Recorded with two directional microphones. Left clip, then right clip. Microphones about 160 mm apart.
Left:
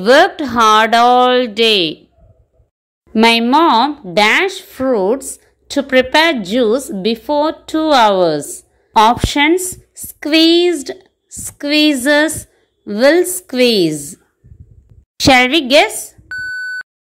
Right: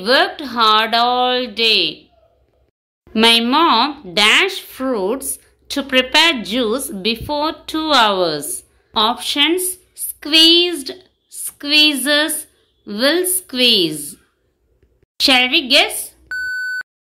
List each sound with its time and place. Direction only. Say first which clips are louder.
0.0 s speech: left 6 dB; 50° left (ahead or behind)
3.1 s a woman's voice: left 2 dB; 35° left (ahead or behind)
16.3 s beep: even; 5° left (ahead or behind)